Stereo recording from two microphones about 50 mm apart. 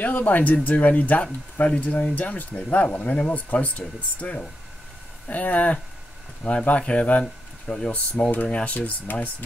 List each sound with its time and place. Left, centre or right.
0.0 s speech: left